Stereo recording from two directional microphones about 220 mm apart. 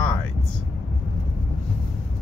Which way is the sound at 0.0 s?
5° left (ahead or behind).